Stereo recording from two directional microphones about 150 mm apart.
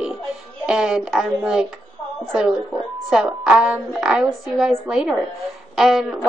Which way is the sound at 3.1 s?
5° right (ahead or behind).